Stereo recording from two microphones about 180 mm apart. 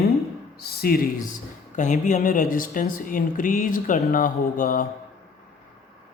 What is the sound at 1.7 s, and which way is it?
Speech, 45° left (ahead or behind).